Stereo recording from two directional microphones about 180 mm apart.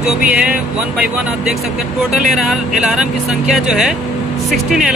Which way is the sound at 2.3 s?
Centre (ahead or behind).